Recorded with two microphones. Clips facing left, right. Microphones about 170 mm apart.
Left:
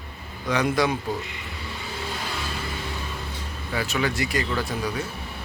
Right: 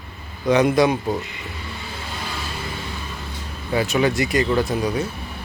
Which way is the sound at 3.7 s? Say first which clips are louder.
Right 7 dB; 25° right (ahead or behind).